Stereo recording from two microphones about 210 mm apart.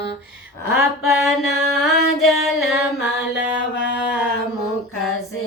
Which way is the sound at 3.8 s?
55° left (ahead or behind).